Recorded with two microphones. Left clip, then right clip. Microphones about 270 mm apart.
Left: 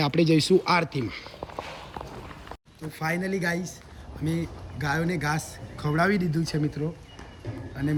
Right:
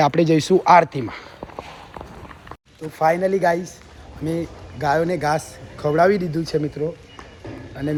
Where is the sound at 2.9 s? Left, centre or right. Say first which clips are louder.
Right 11 dB; centre.